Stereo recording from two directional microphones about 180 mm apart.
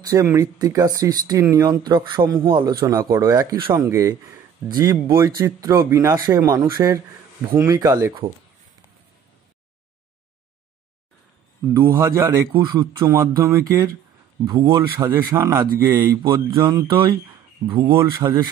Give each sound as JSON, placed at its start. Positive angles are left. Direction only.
{"t": 0.0, "sound": "speech", "side_deg": -15}
{"t": 11.7, "sound": "speech", "side_deg": -15}